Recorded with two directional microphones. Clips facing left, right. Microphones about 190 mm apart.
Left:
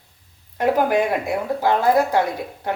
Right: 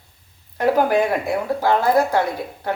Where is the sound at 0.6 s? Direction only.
15° left (ahead or behind).